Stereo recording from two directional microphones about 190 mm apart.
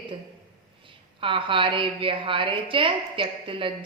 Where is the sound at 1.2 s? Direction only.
25° right (ahead or behind).